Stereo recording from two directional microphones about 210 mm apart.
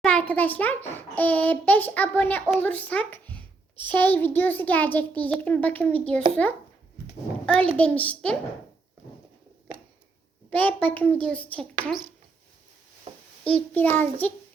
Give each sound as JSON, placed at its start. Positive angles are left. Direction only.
{"t": 0.0, "sound": "a child's voice", "side_deg": 5}
{"t": 7.4, "sound": "a child's voice", "side_deg": 5}
{"t": 10.5, "sound": "a child's voice", "side_deg": 5}
{"t": 13.5, "sound": "a child's voice", "side_deg": 10}